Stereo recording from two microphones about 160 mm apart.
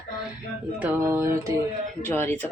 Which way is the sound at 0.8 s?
15° right (ahead or behind).